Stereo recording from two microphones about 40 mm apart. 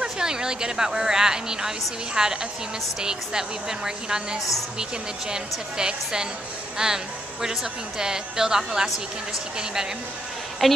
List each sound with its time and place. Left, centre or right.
0.0 s a woman's voice: centre
8.0 s a woman's voice: centre
10.6 s a woman's voice: centre